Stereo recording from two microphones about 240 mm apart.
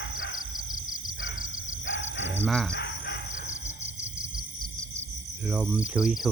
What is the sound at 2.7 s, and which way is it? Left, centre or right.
Chicken, left.